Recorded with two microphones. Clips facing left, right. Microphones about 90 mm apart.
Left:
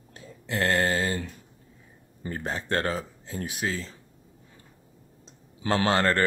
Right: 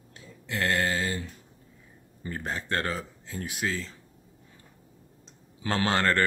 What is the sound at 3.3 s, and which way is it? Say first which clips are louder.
Speech: left 1 dB; 25° left (ahead or behind).